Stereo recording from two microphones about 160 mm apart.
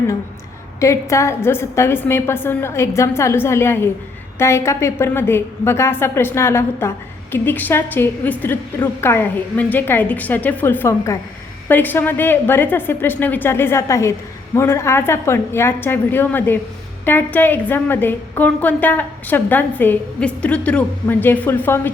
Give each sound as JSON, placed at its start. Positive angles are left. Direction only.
{"t": 0.8, "sound": "a woman's voice", "side_deg": 20}